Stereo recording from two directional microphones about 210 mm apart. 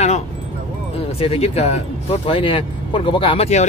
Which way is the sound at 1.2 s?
30° left (ahead or behind).